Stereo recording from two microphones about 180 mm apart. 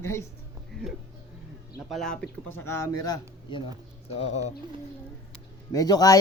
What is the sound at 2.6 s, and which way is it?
Speech, 15° left (ahead or behind).